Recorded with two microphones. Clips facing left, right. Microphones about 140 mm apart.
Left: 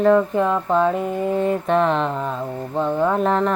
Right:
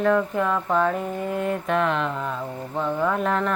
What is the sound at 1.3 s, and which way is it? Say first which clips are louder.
Mantra: left 5 dB; 30° left (ahead or behind).